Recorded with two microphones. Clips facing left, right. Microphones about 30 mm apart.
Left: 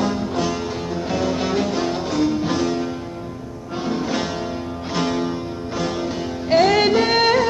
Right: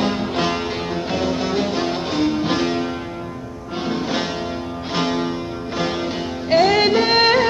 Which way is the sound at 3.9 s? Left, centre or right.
Right.